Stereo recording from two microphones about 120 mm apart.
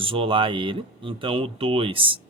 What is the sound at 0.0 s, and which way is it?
A woman's voice, 50° right (ahead or behind).